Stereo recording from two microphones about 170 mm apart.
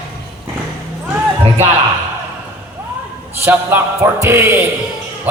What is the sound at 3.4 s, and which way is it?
Speech, 15° right (ahead or behind).